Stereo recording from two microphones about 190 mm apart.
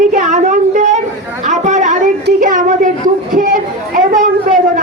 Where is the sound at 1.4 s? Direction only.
40° right (ahead or behind).